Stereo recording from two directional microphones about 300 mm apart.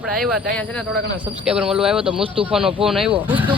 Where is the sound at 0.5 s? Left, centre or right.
Centre.